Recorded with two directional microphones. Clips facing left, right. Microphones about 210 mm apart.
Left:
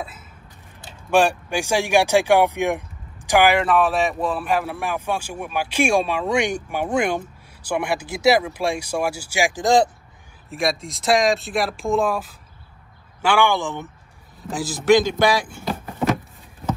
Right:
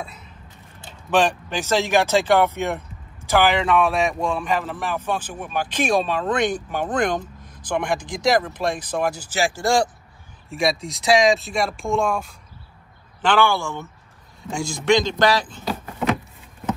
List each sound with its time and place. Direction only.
1.1 s speech: 10° left (ahead or behind)
10.5 s speech: centre (ahead or behind); by 13.8 s 15° left (ahead or behind)
14.4 s speech: 5° left (ahead or behind)